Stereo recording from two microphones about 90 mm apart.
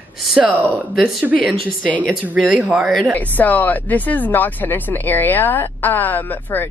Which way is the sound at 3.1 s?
15° left (ahead or behind).